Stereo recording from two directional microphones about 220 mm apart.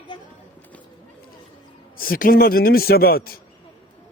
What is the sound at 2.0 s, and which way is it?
A man's voice, 40° left (ahead or behind).